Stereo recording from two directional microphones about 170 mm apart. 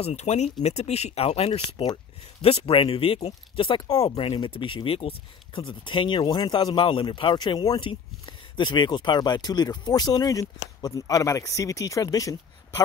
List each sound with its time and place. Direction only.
0.0 s speech: 40° left (ahead or behind); by 4.1 s 20° left (ahead or behind)
4.1 s speech: 30° left (ahead or behind)